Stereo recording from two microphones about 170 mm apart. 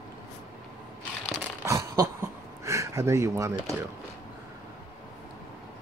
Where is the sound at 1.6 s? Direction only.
20° right (ahead or behind).